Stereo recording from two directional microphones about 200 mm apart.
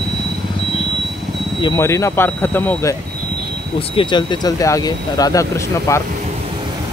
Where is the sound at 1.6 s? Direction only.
15° left (ahead or behind).